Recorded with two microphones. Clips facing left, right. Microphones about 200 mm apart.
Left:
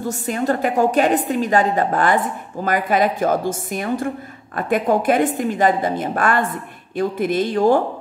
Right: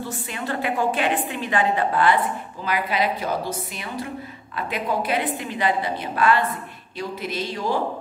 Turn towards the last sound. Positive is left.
turn(degrees=50)  # may be behind; listen again after turning